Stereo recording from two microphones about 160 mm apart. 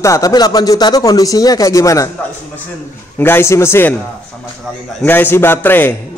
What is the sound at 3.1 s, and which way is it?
Speech, 15° left (ahead or behind).